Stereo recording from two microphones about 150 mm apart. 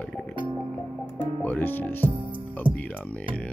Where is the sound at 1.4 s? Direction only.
10° left (ahead or behind).